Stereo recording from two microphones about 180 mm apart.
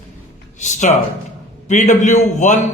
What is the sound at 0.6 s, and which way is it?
A man's voice, 40° left (ahead or behind).